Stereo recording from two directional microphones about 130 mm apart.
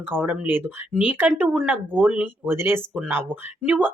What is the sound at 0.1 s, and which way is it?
Speech, 15° right (ahead or behind).